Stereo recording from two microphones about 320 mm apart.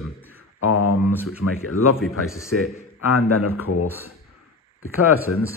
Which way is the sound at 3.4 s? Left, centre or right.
Centre.